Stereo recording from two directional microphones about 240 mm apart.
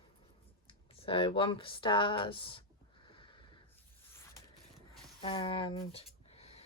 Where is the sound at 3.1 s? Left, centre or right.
Centre.